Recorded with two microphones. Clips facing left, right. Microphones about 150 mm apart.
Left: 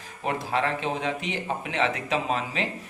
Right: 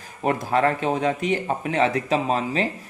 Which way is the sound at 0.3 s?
45° right (ahead or behind).